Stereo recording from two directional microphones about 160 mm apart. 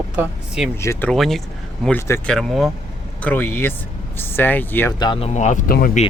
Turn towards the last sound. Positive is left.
turn(degrees=65)  # may be behind; listen again after turning